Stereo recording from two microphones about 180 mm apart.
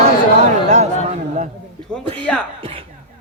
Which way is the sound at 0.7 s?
35° right (ahead or behind).